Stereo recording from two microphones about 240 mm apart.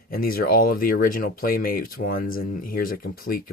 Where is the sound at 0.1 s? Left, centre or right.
Left.